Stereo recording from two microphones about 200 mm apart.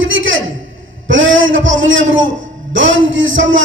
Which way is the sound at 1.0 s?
70° right (ahead or behind).